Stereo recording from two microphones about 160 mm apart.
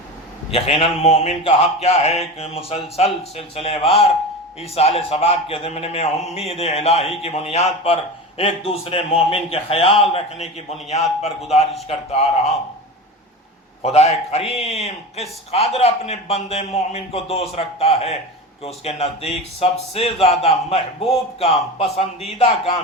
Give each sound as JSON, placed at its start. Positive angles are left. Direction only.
{"t": 0.5, "sound": "speech", "side_deg": 40}
{"t": 13.8, "sound": "speech", "side_deg": 40}